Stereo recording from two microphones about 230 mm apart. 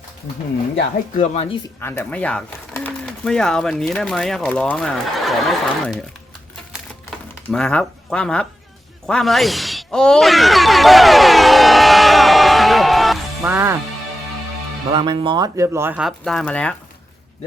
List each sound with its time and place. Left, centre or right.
1.1 s speech: left
1.8 s speech: centre
7.5 s speech: centre
9.0 s shatter: centre
13.4 s music: centre
14.9 s speech: right; by 16.7 s centre